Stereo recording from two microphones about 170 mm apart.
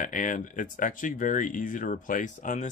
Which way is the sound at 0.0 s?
50° left (ahead or behind).